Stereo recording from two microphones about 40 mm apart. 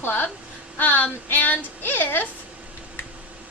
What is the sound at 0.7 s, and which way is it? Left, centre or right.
A woman's voice, left.